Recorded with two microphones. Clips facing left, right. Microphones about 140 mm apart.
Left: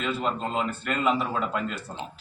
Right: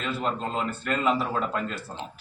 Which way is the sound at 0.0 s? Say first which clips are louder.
Left 1 dB; centre (ahead or behind).